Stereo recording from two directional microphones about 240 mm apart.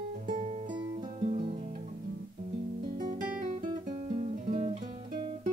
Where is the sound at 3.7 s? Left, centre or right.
Right.